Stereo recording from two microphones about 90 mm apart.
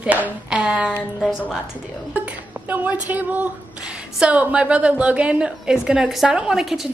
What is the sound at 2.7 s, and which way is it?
A woman's voice, 20° right (ahead or behind).